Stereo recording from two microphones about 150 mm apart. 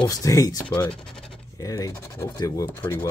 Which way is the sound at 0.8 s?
5° left (ahead or behind).